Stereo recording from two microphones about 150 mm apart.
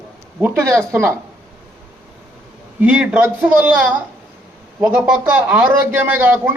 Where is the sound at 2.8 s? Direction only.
10° right (ahead or behind).